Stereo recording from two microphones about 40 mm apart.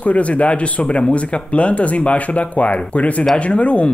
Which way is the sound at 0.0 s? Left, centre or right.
Left.